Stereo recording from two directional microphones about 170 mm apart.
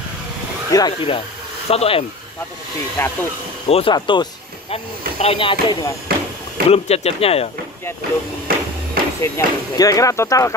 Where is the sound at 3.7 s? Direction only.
30° left (ahead or behind).